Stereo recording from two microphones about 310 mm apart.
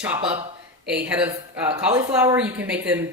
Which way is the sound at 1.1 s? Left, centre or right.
Centre.